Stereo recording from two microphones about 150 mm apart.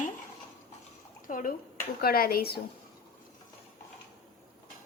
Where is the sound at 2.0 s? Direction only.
80° left.